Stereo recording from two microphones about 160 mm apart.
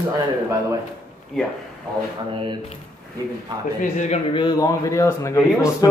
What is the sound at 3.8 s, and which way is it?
Speech, 50° left (ahead or behind).